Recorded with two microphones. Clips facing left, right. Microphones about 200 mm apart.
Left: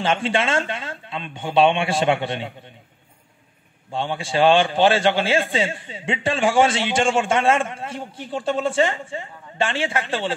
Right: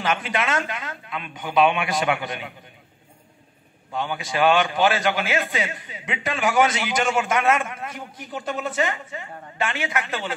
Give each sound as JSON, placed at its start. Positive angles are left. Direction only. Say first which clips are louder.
{"t": 0.0, "sound": "a man's voice", "louder": "left 4 dB", "side_deg": 30}
{"t": 3.9, "sound": "a man's voice", "louder": "left 3 dB", "side_deg": 30}